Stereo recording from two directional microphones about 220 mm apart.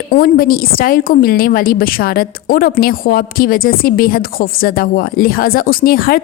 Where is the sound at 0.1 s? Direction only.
40° left (ahead or behind).